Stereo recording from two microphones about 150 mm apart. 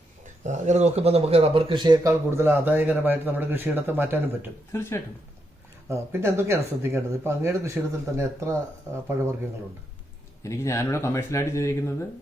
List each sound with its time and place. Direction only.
0.4 s a man's voice: 50° right (ahead or behind); by 4.5 s 15° right (ahead or behind)
4.7 s speech: 15° left (ahead or behind)
5.9 s a man's voice: 15° right (ahead or behind)
10.4 s speech: 20° left (ahead or behind)